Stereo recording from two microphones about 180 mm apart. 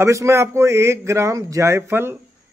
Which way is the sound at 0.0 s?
15° right (ahead or behind).